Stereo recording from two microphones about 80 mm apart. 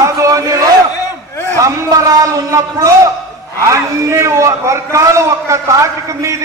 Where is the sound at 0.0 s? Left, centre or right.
Right.